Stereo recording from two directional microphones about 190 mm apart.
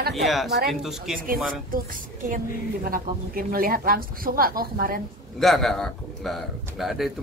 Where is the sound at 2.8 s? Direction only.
50° right (ahead or behind).